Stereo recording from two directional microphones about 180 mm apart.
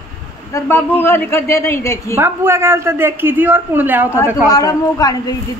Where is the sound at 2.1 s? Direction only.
15° right (ahead or behind).